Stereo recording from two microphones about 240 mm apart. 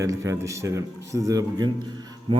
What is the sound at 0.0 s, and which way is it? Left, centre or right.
A man's voice, centre.